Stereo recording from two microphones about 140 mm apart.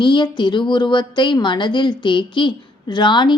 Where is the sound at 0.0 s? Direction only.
35° left (ahead or behind).